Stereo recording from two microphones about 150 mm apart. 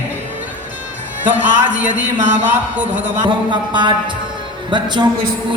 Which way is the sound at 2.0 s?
55° right (ahead or behind).